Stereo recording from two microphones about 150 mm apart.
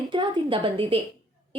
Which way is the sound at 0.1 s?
35° right (ahead or behind).